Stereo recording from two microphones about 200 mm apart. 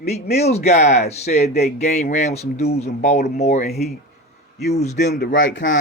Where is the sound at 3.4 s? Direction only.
35° left (ahead or behind).